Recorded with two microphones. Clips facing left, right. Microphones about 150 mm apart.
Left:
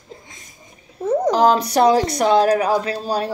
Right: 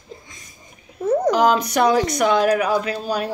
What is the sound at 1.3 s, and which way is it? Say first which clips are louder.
A woman's voice: left 2 dB; 35° left (ahead or behind).